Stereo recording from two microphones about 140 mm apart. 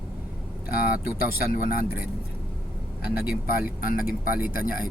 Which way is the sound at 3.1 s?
10° right (ahead or behind).